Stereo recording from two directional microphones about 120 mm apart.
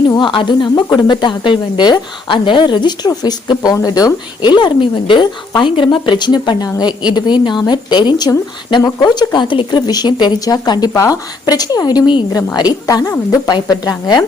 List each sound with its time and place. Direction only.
0.2 s speech: 40° left (ahead or behind)